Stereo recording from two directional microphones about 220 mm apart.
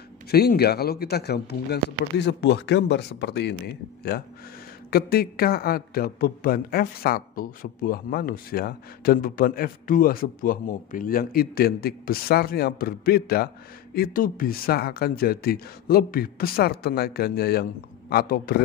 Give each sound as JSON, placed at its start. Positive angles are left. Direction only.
{"t": 0.3, "sound": "a man's voice", "side_deg": 45}